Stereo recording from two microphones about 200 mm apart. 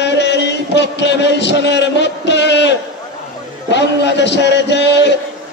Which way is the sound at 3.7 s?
60° left (ahead or behind).